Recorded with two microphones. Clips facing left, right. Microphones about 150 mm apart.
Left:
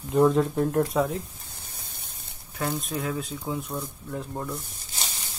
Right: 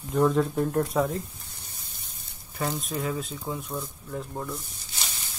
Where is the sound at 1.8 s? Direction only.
55° left (ahead or behind).